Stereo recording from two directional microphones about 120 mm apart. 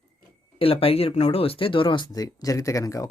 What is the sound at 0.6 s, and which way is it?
Speech, 55° left (ahead or behind).